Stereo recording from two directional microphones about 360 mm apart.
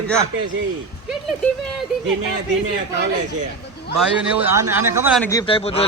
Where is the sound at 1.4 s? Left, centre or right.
Centre.